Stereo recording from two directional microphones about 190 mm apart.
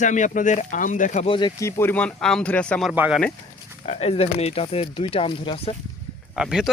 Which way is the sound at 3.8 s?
35° left (ahead or behind).